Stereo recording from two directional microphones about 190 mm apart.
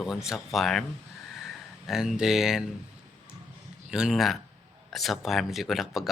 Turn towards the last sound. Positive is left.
turn(degrees=0)  # may be behind; listen again after turning